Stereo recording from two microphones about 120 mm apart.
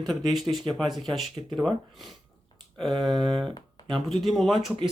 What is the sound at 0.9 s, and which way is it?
Speech, centre (ahead or behind).